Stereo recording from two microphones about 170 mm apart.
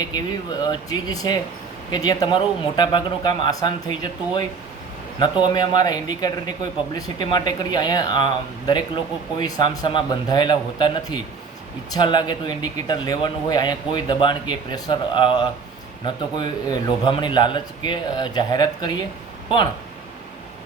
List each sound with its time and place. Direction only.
0.6 s speech: 25° left (ahead or behind)